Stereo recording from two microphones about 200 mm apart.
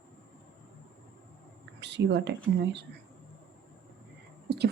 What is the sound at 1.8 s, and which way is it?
Speech, 60° right (ahead or behind).